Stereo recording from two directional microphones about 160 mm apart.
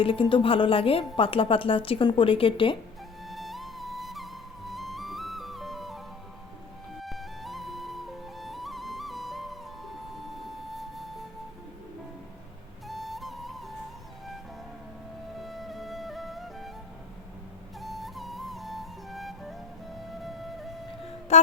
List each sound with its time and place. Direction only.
0.0 s a woman's voice: 35° left (ahead or behind)
3.2 s music: centre (ahead or behind)
7.0 s music: centre (ahead or behind)
12.9 s flute: centre (ahead or behind)
15.4 s music: centre (ahead or behind)
17.7 s music: centre (ahead or behind)
21.3 s music: 45° left (ahead or behind)